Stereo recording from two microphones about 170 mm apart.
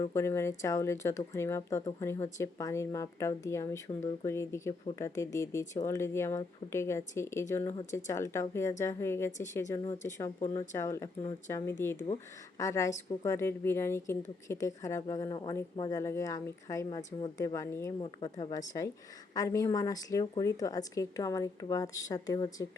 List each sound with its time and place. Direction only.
0.0 s a woman's voice: 15° left (ahead or behind)
18.0 s a woman's voice: 30° left (ahead or behind)